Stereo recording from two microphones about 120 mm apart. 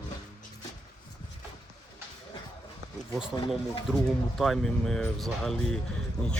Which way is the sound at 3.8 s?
Centre (ahead or behind).